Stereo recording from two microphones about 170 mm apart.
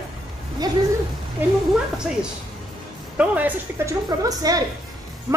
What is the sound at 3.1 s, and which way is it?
Speech, 10° right (ahead or behind).